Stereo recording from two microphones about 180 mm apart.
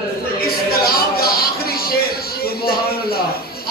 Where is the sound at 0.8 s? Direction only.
55° left (ahead or behind).